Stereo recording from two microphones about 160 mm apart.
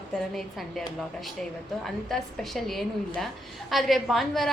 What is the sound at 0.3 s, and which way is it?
A woman's voice, centre (ahead or behind).